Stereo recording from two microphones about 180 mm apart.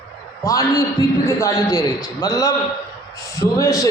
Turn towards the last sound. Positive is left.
turn(degrees=20)  # may be behind; listen again after turning